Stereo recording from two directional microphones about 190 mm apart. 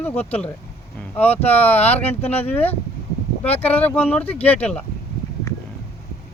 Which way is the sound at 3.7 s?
10° left (ahead or behind).